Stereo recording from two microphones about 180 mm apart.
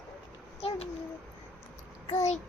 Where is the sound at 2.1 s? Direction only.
40° left (ahead or behind).